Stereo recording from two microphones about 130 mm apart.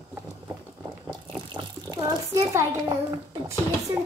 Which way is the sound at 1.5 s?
30° right (ahead or behind).